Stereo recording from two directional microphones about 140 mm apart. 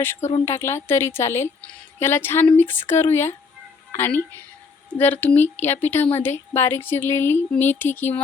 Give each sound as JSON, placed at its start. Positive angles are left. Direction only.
{"t": 0.4, "sound": "speech", "side_deg": 20}